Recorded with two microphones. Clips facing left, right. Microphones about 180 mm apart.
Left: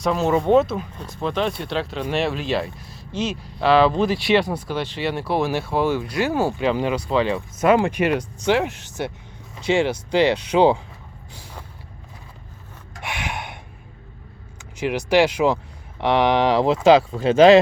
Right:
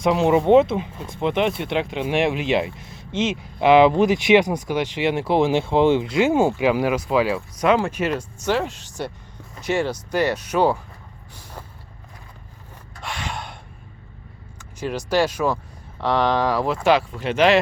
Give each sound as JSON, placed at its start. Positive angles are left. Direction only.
{"t": 0.0, "sound": "speech", "side_deg": -15}
{"t": 6.6, "sound": "speech", "side_deg": -10}
{"t": 7.6, "sound": "speech", "side_deg": 10}
{"t": 10.5, "sound": "speech", "side_deg": 15}
{"t": 13.0, "sound": "snort", "side_deg": 20}
{"t": 14.8, "sound": "speech", "side_deg": 15}